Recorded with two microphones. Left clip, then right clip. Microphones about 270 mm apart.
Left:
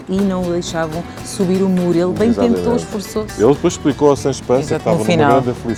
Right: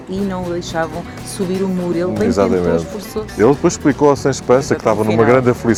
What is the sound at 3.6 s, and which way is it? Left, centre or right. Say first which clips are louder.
Speech: right 1 dB; right.